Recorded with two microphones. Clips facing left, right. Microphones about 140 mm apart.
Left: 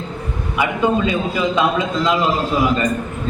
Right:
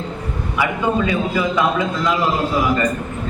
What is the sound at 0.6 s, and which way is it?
A man's voice, 20° left (ahead or behind).